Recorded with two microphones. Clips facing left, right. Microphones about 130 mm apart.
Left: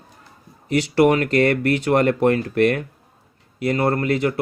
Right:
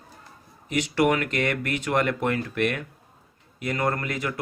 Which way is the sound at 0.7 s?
35° left (ahead or behind).